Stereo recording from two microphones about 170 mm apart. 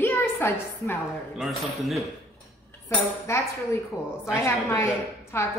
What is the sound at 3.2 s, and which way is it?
A woman's voice, 15° left (ahead or behind).